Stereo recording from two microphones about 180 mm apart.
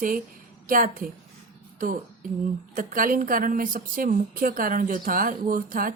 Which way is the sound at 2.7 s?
50° right (ahead or behind).